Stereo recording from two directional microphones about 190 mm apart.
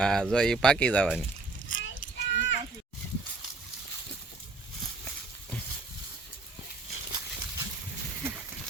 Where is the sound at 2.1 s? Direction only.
70° left (ahead or behind).